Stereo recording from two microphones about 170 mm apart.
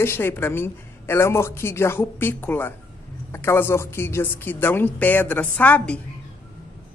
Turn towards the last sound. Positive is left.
turn(degrees=5)  # may be behind; listen again after turning